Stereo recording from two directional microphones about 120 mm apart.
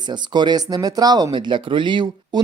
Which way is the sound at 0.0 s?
40° right (ahead or behind).